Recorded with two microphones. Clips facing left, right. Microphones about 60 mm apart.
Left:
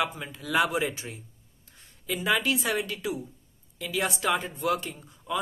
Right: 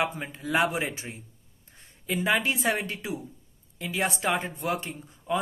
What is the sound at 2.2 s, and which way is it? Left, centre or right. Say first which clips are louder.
A woman's voice: even; right.